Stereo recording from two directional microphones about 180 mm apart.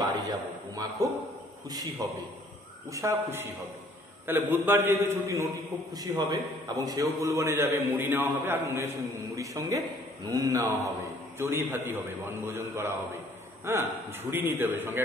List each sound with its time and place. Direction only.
0.0 s a man's voice: 25° right (ahead or behind)